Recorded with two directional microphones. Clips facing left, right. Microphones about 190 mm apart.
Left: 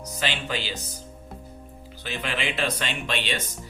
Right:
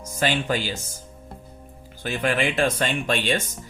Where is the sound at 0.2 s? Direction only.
45° right (ahead or behind).